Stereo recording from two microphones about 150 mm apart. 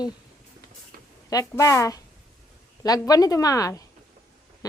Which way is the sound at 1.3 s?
20° left (ahead or behind).